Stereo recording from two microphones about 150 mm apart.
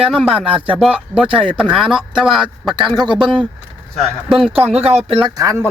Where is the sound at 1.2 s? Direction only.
35° right (ahead or behind).